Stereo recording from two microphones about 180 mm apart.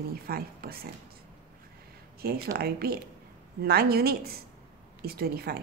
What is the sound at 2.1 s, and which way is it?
Speech, 55° right (ahead or behind).